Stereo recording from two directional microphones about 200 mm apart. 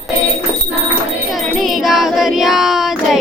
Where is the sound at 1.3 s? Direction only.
Centre (ahead or behind).